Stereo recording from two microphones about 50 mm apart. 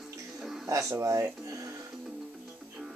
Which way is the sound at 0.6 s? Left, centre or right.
Right.